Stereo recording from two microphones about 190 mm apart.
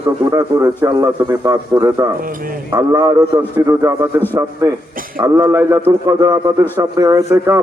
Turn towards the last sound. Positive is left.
turn(degrees=-15)  # may be behind; listen again after turning